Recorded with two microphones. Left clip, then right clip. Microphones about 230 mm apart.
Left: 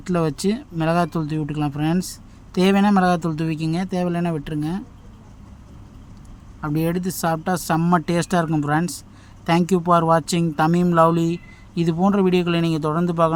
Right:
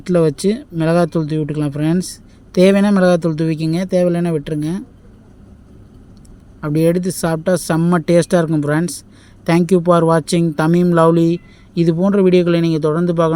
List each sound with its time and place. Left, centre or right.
0.0 s speech: centre
6.6 s speech: centre